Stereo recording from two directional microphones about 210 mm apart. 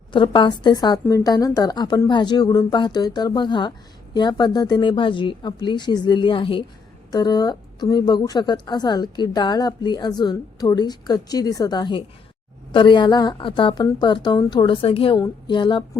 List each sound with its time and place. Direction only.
0.1 s a woman's voice: 20° left (ahead or behind)